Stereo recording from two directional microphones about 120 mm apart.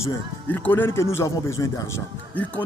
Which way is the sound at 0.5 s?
15° left (ahead or behind).